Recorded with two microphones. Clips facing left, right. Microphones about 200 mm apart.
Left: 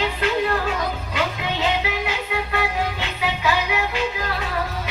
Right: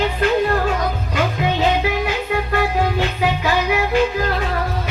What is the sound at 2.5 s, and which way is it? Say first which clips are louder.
Music: right 7 dB; 50° right (ahead or behind).